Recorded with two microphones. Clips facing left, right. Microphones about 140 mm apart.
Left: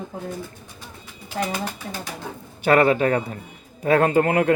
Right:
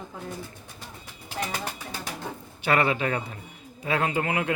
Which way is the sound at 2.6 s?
45° left (ahead or behind).